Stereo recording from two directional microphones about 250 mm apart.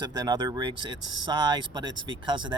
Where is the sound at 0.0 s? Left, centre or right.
Centre.